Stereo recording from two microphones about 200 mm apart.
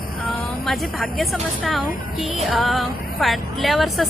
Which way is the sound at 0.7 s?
Centre (ahead or behind).